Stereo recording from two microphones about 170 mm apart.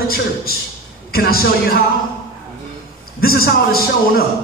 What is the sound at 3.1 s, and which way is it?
A man's voice, 65° left (ahead or behind).